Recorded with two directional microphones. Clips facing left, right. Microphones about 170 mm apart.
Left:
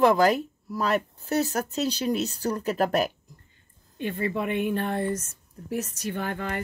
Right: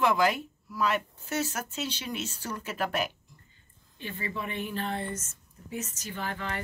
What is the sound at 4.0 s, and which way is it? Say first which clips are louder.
A woman's voice: left 8 dB; 55° left (ahead or behind).